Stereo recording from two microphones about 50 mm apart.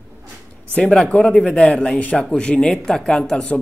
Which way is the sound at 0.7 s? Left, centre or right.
Centre.